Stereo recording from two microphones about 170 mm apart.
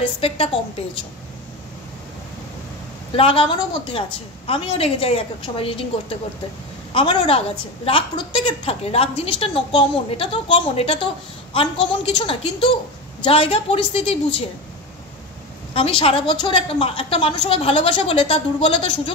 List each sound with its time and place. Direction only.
0.2 s a woman's voice: 35° left (ahead or behind)
3.2 s a woman's voice: 30° left (ahead or behind)
15.7 s a woman's voice: 30° left (ahead or behind)